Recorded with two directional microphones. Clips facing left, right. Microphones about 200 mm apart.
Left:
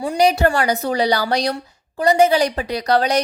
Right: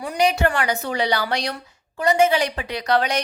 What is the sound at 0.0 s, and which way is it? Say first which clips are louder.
A woman's voice: left 4 dB; 30° left (ahead or behind).